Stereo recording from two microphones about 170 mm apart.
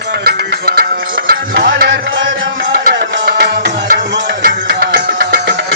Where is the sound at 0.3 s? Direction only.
65° right (ahead or behind).